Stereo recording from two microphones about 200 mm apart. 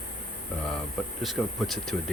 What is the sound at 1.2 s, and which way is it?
Speech, centre (ahead or behind).